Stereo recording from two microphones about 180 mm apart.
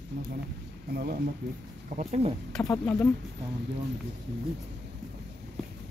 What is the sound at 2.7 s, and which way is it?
Speech, 10° left (ahead or behind).